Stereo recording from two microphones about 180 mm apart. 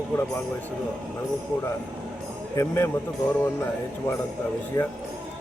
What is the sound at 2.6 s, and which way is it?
Speech, 15° left (ahead or behind).